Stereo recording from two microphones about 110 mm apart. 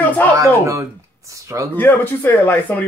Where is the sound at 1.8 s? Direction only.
15° left (ahead or behind).